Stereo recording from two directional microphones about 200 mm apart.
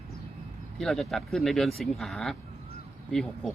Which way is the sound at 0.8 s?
Centre (ahead or behind).